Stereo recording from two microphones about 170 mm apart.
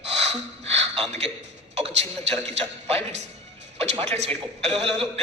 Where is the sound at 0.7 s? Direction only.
35° right (ahead or behind).